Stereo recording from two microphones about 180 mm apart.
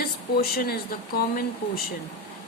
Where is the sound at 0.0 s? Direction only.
60° left (ahead or behind).